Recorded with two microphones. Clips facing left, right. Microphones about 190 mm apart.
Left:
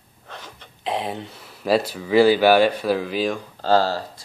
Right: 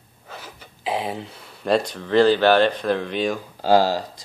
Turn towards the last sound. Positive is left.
turn(degrees=-15)  # may be behind; listen again after turning